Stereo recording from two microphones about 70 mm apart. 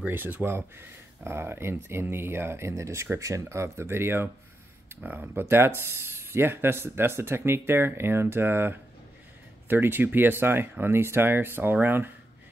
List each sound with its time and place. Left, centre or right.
0.0 s speech: right